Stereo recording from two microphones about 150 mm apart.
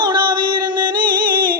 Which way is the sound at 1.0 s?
75° right (ahead or behind).